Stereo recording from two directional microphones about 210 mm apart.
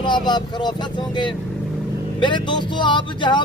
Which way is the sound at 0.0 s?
20° left (ahead or behind).